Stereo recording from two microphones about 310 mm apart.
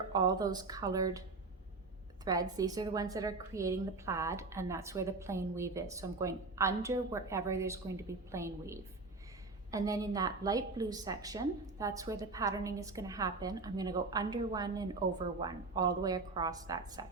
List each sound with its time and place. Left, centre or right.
0.1 s a woman's voice: centre
2.2 s a woman's voice: centre